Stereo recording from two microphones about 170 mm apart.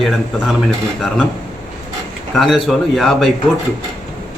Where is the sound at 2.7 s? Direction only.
Centre (ahead or behind).